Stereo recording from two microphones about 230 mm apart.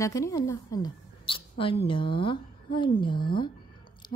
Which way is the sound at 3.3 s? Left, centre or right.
Left.